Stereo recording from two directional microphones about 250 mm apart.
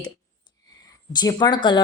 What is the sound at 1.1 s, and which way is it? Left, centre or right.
Speech, centre.